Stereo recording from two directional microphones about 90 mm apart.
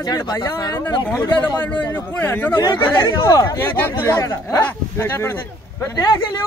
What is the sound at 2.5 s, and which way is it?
Speech, 55° left (ahead or behind).